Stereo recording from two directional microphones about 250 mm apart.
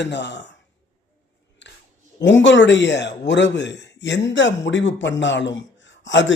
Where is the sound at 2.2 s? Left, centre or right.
Left.